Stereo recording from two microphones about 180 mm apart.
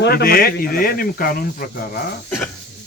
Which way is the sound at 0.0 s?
60° left (ahead or behind).